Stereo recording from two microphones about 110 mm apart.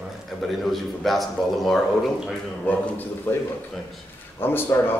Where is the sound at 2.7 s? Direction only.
15° left (ahead or behind).